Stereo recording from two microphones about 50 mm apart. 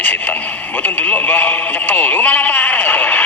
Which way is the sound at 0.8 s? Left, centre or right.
Left.